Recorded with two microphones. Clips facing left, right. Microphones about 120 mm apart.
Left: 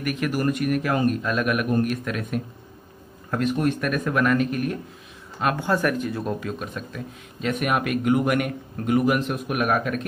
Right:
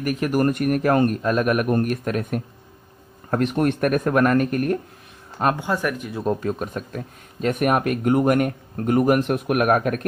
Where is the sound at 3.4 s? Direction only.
60° right (ahead or behind).